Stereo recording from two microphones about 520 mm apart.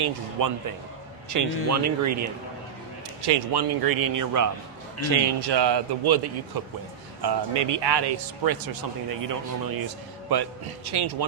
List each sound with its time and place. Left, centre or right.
0.0 s speech: right
3.2 s speech: right
5.1 s a man's voice: right